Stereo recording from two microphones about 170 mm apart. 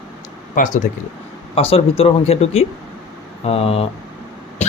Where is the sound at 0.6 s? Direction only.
50° left (ahead or behind).